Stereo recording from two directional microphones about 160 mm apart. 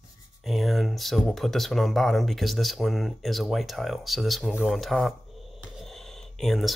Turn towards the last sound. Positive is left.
turn(degrees=0)  # may be behind; listen again after turning